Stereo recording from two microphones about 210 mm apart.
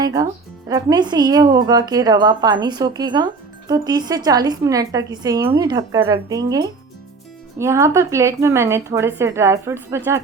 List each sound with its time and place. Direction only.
0.0 s a woman's voice: 15° right (ahead or behind)